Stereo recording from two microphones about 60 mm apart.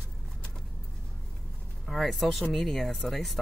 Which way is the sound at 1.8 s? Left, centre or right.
Centre.